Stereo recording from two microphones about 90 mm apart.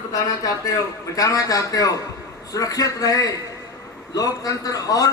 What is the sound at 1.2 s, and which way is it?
A man's voice, 40° left (ahead or behind).